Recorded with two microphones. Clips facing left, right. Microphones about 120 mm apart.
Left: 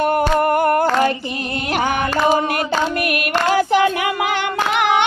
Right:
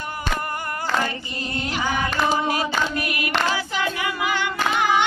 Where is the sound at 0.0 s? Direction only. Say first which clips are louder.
Left 13 dB; 65° left (ahead or behind).